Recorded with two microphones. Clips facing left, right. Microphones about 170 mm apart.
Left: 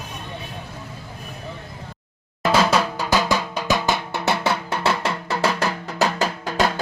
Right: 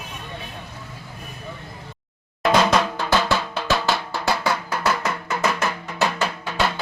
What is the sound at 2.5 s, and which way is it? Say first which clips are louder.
Drum: right 1 dB; 5° left (ahead or behind).